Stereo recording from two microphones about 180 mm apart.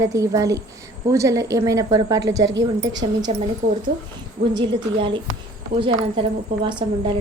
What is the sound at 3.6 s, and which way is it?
Speech, 40° right (ahead or behind).